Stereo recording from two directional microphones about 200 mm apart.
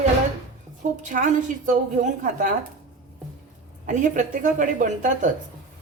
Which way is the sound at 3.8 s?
40° right (ahead or behind).